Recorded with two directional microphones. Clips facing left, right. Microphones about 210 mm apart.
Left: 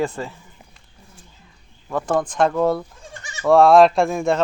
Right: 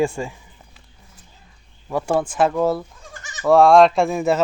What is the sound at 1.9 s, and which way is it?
A man's voice, 10° right (ahead or behind).